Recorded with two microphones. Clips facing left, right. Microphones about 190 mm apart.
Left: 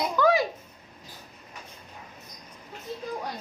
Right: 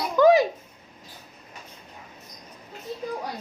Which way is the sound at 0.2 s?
20° right (ahead or behind).